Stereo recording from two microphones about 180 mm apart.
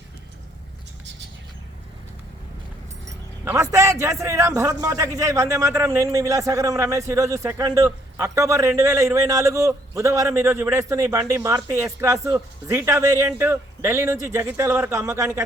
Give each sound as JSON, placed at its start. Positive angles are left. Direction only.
{"t": 3.4, "sound": "a man's voice", "side_deg": -15}